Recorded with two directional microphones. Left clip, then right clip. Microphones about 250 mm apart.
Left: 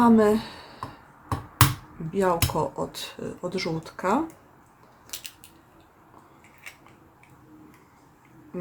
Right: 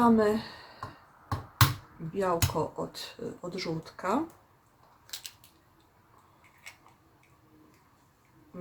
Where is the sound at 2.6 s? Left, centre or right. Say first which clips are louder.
Left 5 dB; centre.